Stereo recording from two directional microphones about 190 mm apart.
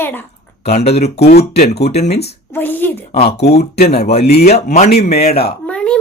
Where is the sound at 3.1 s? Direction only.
30° left (ahead or behind).